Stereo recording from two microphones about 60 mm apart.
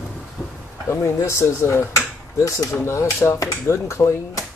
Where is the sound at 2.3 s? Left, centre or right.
Left.